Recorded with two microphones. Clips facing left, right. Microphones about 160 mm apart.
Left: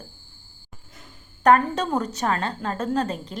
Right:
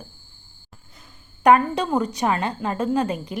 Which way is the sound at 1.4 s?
10° right (ahead or behind).